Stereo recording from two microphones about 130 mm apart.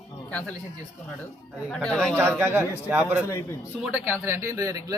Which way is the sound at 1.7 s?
5° left (ahead or behind).